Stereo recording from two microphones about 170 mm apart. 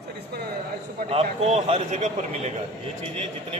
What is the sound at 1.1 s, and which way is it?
A man's voice, 35° right (ahead or behind).